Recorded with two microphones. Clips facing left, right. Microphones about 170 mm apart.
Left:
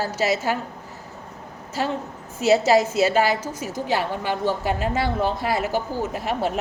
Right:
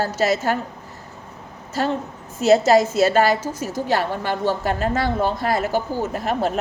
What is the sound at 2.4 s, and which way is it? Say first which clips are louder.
A woman's voice: right 3 dB; 10° left (ahead or behind).